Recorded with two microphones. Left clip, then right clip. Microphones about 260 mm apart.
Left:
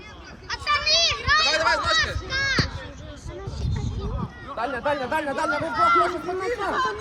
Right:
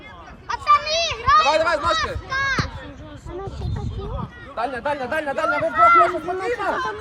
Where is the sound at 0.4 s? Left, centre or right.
Centre.